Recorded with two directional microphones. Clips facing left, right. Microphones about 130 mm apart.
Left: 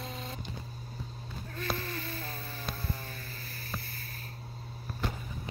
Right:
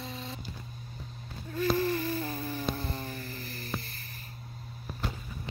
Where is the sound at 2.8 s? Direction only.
25° right (ahead or behind).